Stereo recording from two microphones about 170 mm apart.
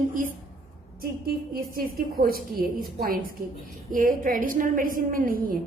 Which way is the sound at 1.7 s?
60° right (ahead or behind).